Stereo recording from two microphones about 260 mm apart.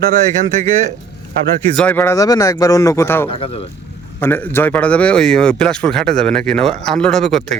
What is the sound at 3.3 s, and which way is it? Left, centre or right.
Speech, left.